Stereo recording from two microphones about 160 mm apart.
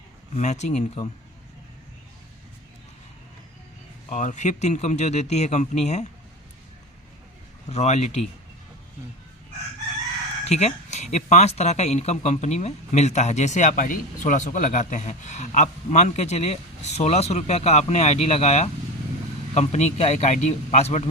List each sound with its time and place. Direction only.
0.3 s speech: 45° left (ahead or behind)
4.1 s speech: 50° left (ahead or behind)
7.7 s speech: 45° left (ahead or behind)
10.5 s speech: 40° left (ahead or behind)